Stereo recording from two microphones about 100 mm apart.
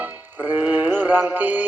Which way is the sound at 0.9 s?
20° right (ahead or behind).